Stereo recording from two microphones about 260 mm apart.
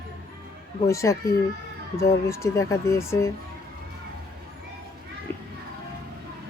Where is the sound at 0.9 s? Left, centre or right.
Centre.